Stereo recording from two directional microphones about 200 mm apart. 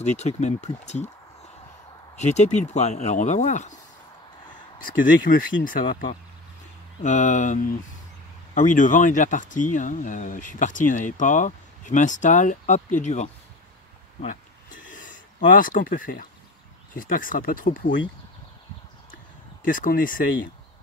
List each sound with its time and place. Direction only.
0.0 s speech: 35° left (ahead or behind)
2.1 s speech: 35° left (ahead or behind)
14.2 s a sound: 40° left (ahead or behind)
15.6 s speech: 45° left (ahead or behind)
19.6 s speech: 45° left (ahead or behind)